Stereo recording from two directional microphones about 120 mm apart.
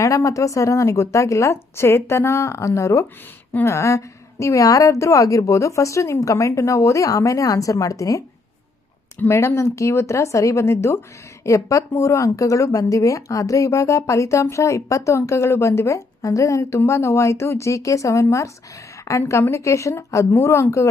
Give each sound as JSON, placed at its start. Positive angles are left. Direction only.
{"t": 0.0, "sound": "speech", "side_deg": 25}